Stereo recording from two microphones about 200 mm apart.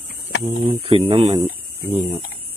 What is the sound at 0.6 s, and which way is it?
Speech, 25° right (ahead or behind).